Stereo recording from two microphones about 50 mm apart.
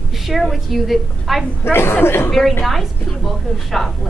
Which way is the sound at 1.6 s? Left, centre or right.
Left.